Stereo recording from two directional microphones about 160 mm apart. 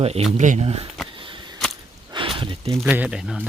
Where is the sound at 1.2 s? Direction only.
30° right (ahead or behind).